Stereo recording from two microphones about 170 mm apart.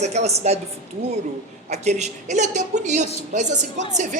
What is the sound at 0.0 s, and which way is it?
Speech, 40° right (ahead or behind).